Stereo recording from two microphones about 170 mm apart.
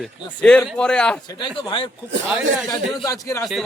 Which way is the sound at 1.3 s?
30° left (ahead or behind).